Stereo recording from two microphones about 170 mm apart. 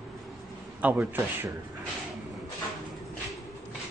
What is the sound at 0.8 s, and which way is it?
Speech, 10° right (ahead or behind).